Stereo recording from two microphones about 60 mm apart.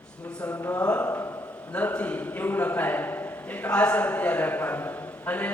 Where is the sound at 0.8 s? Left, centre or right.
Left.